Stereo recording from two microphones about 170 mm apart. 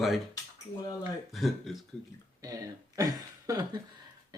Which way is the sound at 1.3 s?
Centre (ahead or behind).